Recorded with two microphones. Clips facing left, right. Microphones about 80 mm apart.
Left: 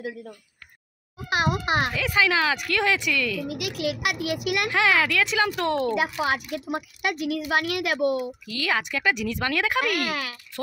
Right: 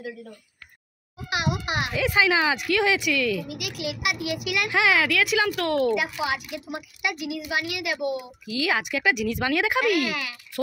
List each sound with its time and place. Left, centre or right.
1.3 s a child's voice: left
2.0 s speech: centre
2.7 s speech: centre
3.4 s a child's voice: left
4.6 s a child's voice: centre
5.9 s a woman's voice: left
8.2 s speech: centre
10.0 s a child's voice: left